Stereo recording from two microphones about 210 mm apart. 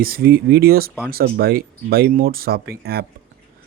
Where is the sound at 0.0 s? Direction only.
45° right (ahead or behind).